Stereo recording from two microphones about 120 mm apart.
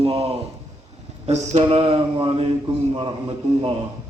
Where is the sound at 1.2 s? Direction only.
65° right (ahead or behind); by 3.7 s 45° right (ahead or behind).